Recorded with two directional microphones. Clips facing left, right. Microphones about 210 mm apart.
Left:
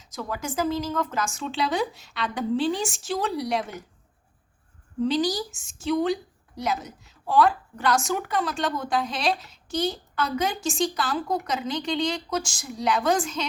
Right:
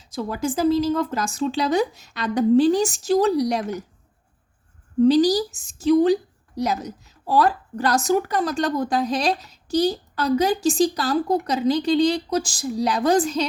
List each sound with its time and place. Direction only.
0.0 s a woman's voice: 30° right (ahead or behind)
5.0 s a woman's voice: 40° right (ahead or behind)